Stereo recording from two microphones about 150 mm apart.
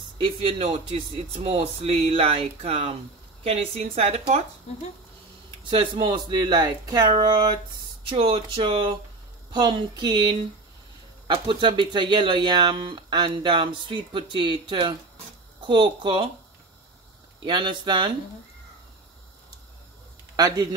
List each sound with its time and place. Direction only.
0.2 s a woman's voice: 35° right (ahead or behind)
5.6 s speech: 35° right (ahead or behind)
17.5 s speech: 30° right (ahead or behind)
20.3 s speech: 25° right (ahead or behind)